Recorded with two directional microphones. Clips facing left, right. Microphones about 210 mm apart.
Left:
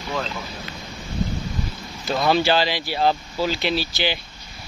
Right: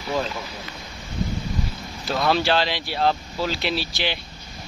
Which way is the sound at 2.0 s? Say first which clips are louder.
Left 2 dB; centre (ahead or behind).